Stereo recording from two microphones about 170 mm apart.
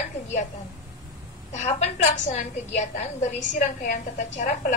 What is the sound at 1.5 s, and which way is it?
A woman's voice, 45° left (ahead or behind).